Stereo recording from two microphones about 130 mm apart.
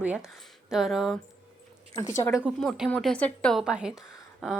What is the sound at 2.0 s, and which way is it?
Speech, 30° left (ahead or behind).